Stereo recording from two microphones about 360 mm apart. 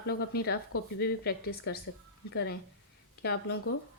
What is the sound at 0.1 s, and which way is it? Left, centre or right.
A woman's voice, left.